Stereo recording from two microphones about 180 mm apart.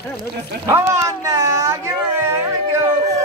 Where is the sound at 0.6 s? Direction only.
15° right (ahead or behind).